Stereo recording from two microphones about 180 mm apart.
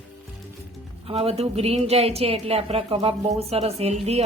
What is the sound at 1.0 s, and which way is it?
Speech, 35° right (ahead or behind).